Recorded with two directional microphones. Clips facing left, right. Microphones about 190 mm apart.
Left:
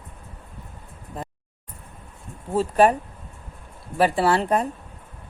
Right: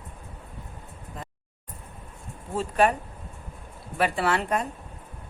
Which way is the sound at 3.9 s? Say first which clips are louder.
Left 5 dB; 35° left (ahead or behind).